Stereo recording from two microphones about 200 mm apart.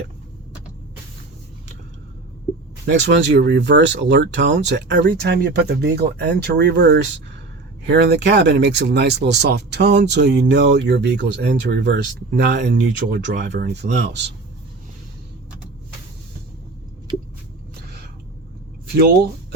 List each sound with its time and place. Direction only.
2.8 s speech: 60° right (ahead or behind)